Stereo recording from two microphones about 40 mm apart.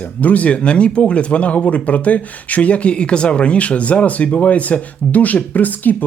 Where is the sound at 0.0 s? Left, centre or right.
Left.